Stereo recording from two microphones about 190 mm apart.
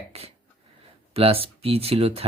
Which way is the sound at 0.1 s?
35° right (ahead or behind).